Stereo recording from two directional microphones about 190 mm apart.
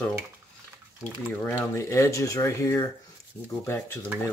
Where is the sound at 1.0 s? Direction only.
10° right (ahead or behind).